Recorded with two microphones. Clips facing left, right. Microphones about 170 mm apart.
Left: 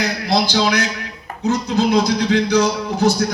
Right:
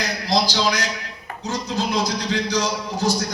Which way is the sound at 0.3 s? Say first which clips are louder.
Left 3 dB; 65° left (ahead or behind).